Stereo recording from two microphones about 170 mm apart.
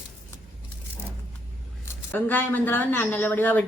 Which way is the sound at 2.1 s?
10° left (ahead or behind).